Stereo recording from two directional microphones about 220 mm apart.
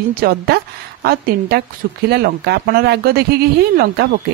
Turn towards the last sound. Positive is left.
turn(degrees=-45)  # may be behind; listen again after turning